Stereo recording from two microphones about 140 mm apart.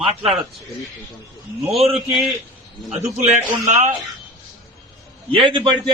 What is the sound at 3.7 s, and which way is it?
Speech, 55° right (ahead or behind).